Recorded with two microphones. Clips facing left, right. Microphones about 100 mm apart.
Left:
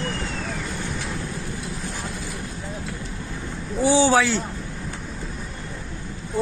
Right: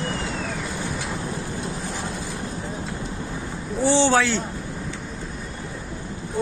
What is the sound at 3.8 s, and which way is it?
Speech, 10° left (ahead or behind).